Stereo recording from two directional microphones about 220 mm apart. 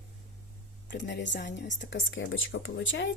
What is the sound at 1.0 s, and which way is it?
Speech, 55° left (ahead or behind).